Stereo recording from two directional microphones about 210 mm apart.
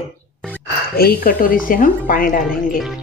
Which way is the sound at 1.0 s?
45° left (ahead or behind).